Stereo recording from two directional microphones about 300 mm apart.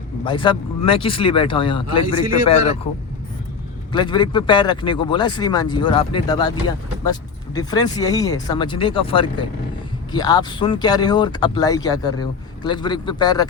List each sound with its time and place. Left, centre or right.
0.3 s speech: centre
3.9 s speech: centre